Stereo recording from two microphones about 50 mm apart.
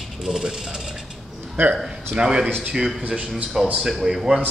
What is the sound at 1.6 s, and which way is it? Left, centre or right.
Speech, right.